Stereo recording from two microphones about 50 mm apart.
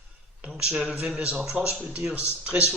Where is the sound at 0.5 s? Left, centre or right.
Centre.